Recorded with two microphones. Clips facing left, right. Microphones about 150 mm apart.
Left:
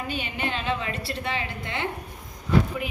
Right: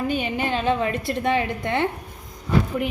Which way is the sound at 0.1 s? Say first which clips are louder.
Right 6 dB; 50° right (ahead or behind).